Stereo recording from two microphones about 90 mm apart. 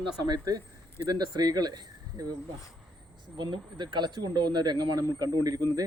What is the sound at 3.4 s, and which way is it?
Speech, 55° right (ahead or behind).